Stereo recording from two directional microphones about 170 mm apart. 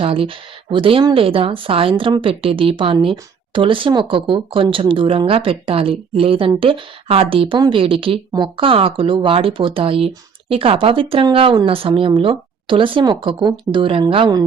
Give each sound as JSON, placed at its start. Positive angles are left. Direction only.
{"t": 0.0, "sound": "speech", "side_deg": -30}